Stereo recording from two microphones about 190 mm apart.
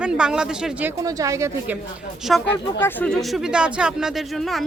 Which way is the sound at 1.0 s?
15° right (ahead or behind).